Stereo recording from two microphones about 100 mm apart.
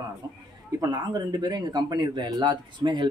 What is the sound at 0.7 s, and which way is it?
Speech, 40° right (ahead or behind).